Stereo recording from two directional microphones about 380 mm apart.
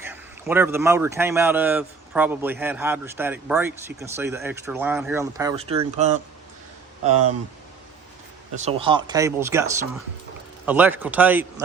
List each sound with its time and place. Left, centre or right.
0.0 s speech: centre
7.1 s speech: right
8.5 s speech: centre